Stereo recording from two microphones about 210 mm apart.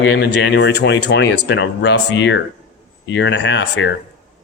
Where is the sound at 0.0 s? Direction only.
50° left (ahead or behind).